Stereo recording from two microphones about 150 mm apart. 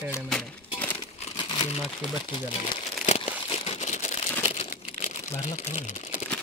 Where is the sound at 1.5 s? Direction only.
35° left (ahead or behind).